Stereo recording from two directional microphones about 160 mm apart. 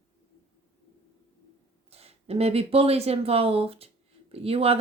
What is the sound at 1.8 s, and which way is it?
Speech, 40° right (ahead or behind).